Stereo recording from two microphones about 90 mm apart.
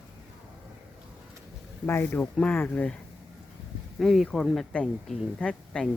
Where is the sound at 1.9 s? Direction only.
30° left (ahead or behind).